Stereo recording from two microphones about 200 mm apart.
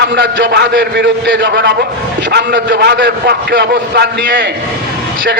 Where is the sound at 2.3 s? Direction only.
50° right (ahead or behind).